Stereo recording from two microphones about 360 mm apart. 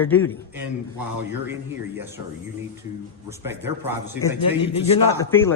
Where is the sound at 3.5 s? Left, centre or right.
Centre.